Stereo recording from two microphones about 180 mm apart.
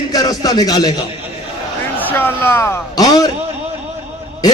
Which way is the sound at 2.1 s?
10° left (ahead or behind).